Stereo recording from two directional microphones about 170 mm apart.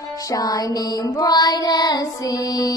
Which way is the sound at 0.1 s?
20° left (ahead or behind).